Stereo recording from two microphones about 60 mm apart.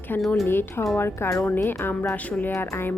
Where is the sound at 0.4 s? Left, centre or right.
Left.